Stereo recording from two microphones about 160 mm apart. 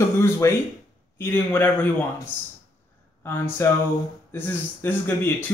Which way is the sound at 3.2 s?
15° left (ahead or behind).